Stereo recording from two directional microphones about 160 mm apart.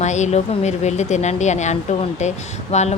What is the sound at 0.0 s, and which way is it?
A woman's voice, 45° left (ahead or behind).